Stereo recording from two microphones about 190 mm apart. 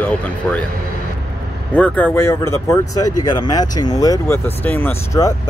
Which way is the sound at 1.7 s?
5° left (ahead or behind).